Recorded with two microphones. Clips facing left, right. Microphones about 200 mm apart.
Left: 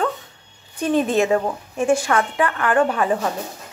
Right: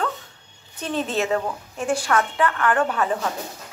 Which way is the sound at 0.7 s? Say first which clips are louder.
Left 7 dB; 10° left (ahead or behind).